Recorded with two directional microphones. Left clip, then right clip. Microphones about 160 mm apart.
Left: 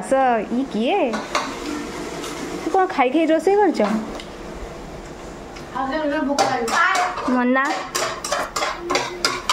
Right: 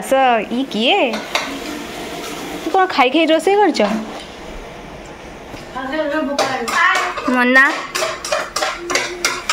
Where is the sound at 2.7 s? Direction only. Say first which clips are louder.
Right 4 dB; 5° left (ahead or behind).